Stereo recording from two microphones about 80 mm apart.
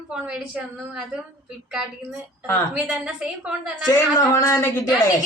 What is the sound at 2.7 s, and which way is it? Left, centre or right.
Speech, centre.